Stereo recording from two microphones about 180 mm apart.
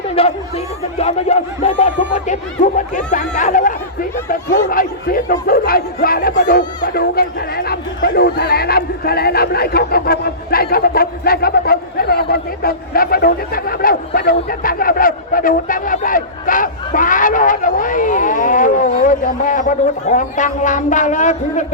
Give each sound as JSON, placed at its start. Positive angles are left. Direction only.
{"t": 0.1, "sound": "speech", "side_deg": 35}